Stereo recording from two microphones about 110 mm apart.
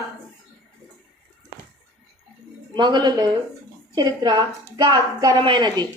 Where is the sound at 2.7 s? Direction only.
40° right (ahead or behind).